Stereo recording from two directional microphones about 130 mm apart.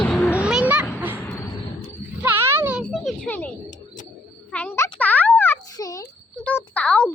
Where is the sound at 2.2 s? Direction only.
20° right (ahead or behind).